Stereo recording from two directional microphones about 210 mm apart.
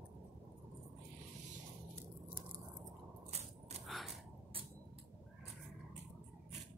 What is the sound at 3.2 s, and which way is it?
Biting, 30° right (ahead or behind).